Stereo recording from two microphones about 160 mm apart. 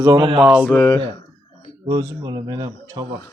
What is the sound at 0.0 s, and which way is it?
Speech, 25° right (ahead or behind).